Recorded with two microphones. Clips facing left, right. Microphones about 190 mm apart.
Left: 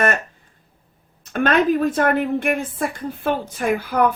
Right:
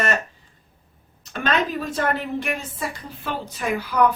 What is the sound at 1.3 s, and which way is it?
A woman's voice, 55° left (ahead or behind).